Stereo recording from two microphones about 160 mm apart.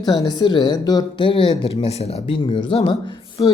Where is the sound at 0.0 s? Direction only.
25° left (ahead or behind).